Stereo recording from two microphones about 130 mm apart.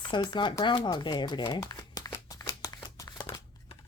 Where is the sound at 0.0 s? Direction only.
35° left (ahead or behind).